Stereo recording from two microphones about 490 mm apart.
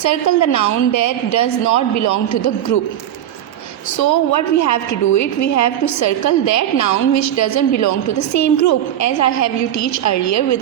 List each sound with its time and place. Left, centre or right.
0.0 s a woman's voice: left
3.9 s a woman's voice: left